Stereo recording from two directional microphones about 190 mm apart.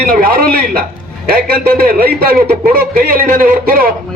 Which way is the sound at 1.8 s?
55° right (ahead or behind).